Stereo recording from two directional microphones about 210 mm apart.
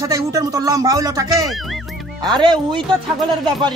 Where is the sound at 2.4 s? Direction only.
20° right (ahead or behind).